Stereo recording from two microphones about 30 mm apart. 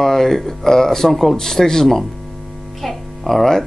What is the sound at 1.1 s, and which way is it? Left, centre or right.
Speech, centre.